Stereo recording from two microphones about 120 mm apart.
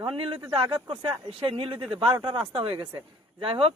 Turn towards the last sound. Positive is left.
turn(degrees=-50)  # may be behind; listen again after turning